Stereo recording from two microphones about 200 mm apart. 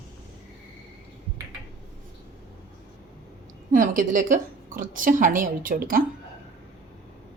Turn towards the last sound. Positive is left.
turn(degrees=-45)  # may be behind; listen again after turning